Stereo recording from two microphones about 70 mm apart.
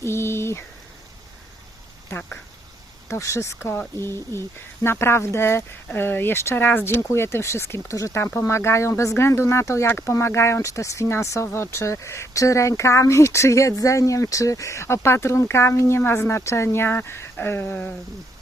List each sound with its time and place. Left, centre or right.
0.0 s speech: left
2.0 s speech: left
3.1 s speech: left
8.2 s speech: left